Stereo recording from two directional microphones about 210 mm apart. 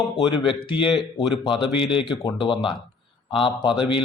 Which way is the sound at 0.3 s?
25° left (ahead or behind).